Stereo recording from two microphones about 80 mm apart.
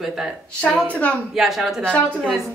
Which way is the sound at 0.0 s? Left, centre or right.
Centre.